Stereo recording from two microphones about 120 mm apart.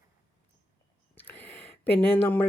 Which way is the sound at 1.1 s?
15° left (ahead or behind).